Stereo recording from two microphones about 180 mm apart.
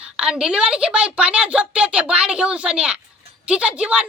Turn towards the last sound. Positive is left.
turn(degrees=-5)  # may be behind; listen again after turning